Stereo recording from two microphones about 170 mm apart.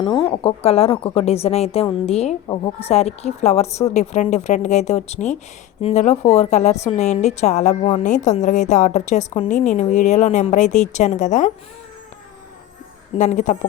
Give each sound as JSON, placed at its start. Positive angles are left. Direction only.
{"t": 0.3, "sound": "a woman's voice", "side_deg": 35}
{"t": 13.1, "sound": "a woman's voice", "side_deg": 45}